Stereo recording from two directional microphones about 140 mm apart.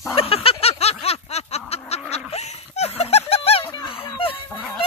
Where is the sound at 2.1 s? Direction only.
50° left (ahead or behind).